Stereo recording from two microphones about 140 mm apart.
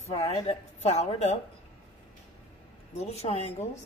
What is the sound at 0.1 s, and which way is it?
A woman's voice, 45° left (ahead or behind).